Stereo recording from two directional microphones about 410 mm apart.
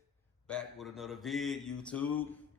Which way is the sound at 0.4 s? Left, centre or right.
Centre.